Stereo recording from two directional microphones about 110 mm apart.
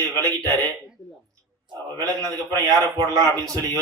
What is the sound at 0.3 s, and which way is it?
Speech, 30° right (ahead or behind).